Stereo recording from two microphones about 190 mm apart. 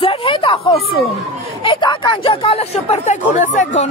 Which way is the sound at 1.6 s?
25° left (ahead or behind).